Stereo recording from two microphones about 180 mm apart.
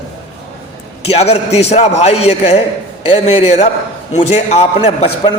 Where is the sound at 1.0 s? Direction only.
35° left (ahead or behind).